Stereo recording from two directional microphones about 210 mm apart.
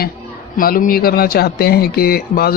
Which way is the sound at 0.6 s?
45° left (ahead or behind).